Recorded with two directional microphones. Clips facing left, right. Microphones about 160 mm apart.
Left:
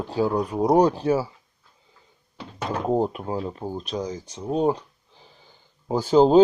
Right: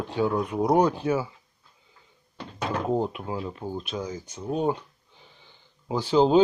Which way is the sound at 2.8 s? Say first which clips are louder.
Left 5 dB; 40° left (ahead or behind).